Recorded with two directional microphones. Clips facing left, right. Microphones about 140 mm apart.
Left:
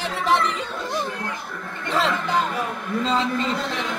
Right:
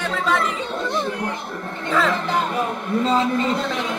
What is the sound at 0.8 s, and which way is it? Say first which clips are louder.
Speech: right 3 dB; 20° right (ahead or behind).